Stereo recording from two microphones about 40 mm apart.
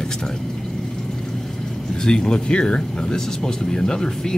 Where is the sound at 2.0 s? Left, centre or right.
Centre.